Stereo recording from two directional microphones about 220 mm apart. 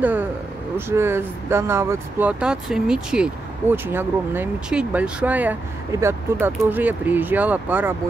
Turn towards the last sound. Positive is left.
turn(degrees=-10)  # may be behind; listen again after turning